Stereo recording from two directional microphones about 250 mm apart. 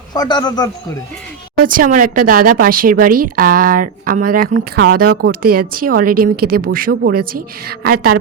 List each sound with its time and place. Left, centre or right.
0.1 s a man's voice: centre
1.6 s a woman's voice: right